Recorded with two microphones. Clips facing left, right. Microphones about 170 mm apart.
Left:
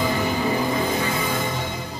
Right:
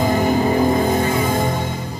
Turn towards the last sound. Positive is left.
turn(degrees=-45)  # may be behind; listen again after turning